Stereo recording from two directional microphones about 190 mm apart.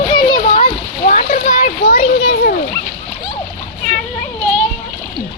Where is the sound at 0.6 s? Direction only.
45° left (ahead or behind).